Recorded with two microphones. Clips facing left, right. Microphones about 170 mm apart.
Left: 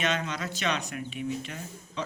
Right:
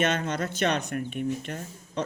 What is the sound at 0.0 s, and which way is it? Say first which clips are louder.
Speech: right 4 dB; 55° right (ahead or behind).